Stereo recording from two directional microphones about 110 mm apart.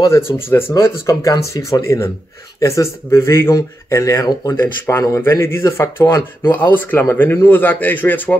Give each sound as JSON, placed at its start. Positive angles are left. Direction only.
{"t": 0.0, "sound": "speech", "side_deg": 25}